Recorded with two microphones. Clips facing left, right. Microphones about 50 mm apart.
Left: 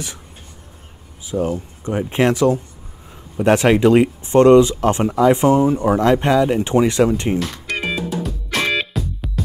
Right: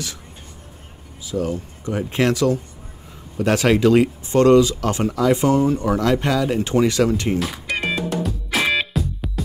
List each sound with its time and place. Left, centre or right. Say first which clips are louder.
1.3 s speech: left 3 dB; left
7.3 s music: left 1 dB; centre